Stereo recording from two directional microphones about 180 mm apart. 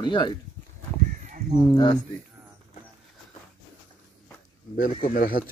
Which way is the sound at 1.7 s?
20° left (ahead or behind).